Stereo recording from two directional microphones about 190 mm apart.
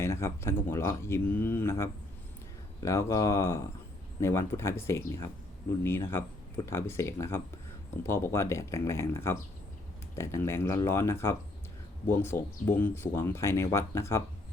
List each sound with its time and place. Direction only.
0.0 s speech: 15° left (ahead or behind)